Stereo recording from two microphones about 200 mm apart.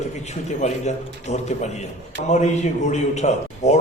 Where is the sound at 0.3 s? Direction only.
35° left (ahead or behind).